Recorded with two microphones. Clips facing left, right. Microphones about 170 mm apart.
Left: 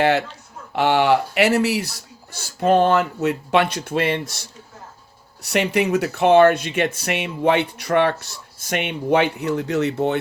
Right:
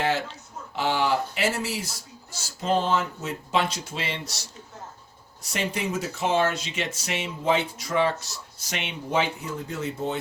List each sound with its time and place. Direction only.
0.0 s speech: 65° left (ahead or behind)
5.4 s speech: 70° left (ahead or behind)